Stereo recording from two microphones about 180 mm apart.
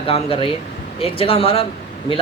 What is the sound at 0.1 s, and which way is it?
Speech, 30° left (ahead or behind).